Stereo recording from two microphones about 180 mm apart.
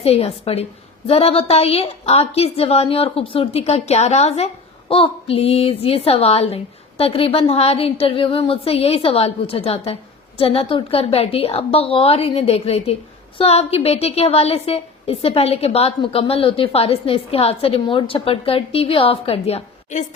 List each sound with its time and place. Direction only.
0.0 s a woman's voice: 35° left (ahead or behind)